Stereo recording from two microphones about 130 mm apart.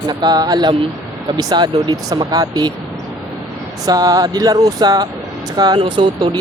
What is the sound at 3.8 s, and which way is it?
Speech, 30° right (ahead or behind).